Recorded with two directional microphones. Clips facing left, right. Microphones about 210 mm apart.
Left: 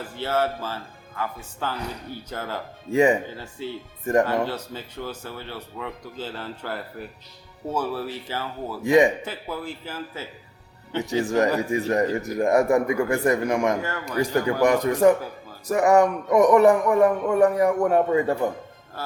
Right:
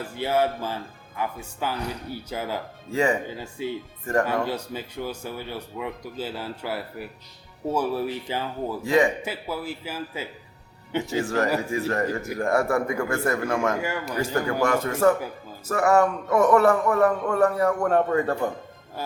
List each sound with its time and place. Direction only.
0.2 s speech: 15° right (ahead or behind)
2.9 s speech: 20° left (ahead or behind)
3.2 s speech: 15° right (ahead or behind)
4.0 s speech: 20° left (ahead or behind)
4.4 s speech: 10° right (ahead or behind)
8.8 s a man's voice: 20° left (ahead or behind)
9.2 s speech: 10° right (ahead or behind)
11.0 s a man's voice: 15° left (ahead or behind)
13.8 s speech: 10° right (ahead or behind)
14.2 s a man's voice: 15° left (ahead or behind)